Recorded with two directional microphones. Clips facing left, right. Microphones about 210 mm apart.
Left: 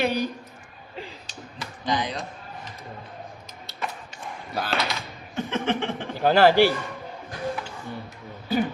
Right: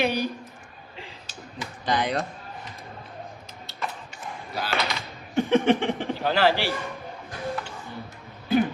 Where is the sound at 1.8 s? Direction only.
55° right (ahead or behind).